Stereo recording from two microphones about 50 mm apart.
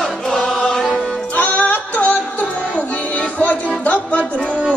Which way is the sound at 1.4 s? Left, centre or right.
Left.